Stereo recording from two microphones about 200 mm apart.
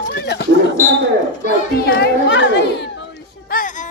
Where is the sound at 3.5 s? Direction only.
45° left (ahead or behind).